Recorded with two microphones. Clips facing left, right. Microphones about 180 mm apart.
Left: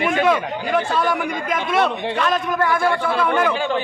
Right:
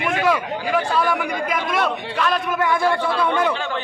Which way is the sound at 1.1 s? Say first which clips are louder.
Even; centre (ahead or behind).